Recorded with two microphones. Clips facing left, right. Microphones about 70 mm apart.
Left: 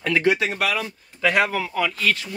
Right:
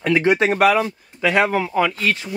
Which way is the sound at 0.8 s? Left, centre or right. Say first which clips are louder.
Right 2 dB; right.